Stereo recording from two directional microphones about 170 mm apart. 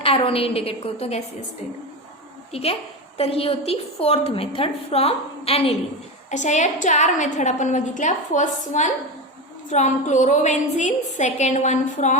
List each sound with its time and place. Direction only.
0.0 s a woman's voice: 35° left (ahead or behind)
2.5 s a woman's voice: 35° left (ahead or behind)